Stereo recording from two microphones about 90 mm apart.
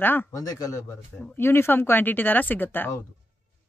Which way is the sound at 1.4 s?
25° left (ahead or behind).